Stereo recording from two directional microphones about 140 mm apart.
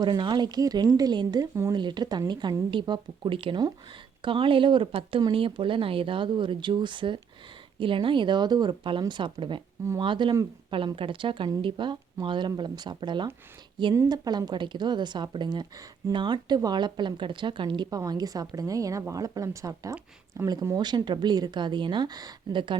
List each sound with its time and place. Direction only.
0.0 s a woman's voice: 30° right (ahead or behind)